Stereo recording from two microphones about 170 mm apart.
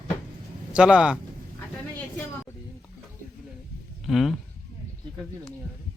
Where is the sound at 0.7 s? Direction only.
5° right (ahead or behind).